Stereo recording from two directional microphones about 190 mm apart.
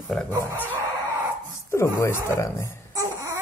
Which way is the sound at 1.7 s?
15° left (ahead or behind).